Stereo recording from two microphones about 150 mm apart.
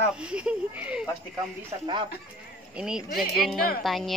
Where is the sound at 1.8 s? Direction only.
35° right (ahead or behind).